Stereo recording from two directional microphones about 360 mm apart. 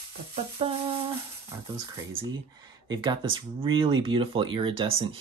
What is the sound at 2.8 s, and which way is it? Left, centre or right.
Speech, centre.